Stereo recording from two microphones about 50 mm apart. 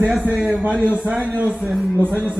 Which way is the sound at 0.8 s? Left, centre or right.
Right.